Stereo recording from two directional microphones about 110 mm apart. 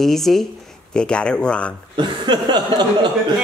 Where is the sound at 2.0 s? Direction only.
40° right (ahead or behind).